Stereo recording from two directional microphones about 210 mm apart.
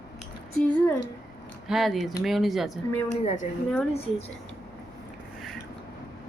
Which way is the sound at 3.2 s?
30° left (ahead or behind).